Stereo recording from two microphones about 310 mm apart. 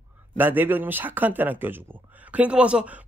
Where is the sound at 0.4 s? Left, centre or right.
Centre.